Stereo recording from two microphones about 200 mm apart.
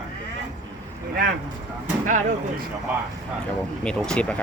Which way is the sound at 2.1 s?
40° right (ahead or behind).